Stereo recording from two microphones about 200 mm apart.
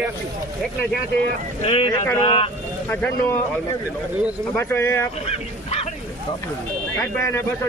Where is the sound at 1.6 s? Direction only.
25° left (ahead or behind).